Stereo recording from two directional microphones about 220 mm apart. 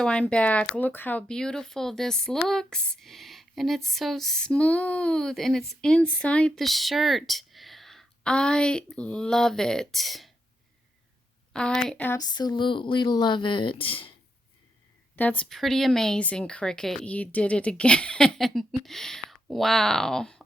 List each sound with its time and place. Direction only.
0.0 s speech: 5° left (ahead or behind)
11.8 s a sound: 5° left (ahead or behind); by 14.1 s 25° left (ahead or behind)
15.1 s speech: 10° left (ahead or behind)